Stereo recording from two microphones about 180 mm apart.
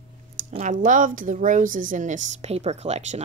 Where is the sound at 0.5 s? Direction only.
40° right (ahead or behind).